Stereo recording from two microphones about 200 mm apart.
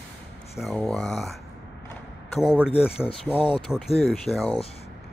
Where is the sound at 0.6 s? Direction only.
Centre (ahead or behind).